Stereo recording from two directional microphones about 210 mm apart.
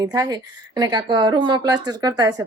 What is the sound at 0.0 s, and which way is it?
A woman's voice, 20° right (ahead or behind).